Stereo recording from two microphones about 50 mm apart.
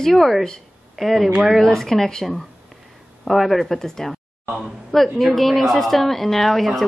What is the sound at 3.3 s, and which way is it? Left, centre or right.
A woman's voice, centre.